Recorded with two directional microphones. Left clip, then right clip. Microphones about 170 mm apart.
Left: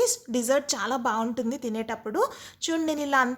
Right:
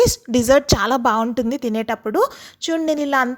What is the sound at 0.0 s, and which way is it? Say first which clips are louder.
A woman's voice: right 9 dB; 50° right (ahead or behind).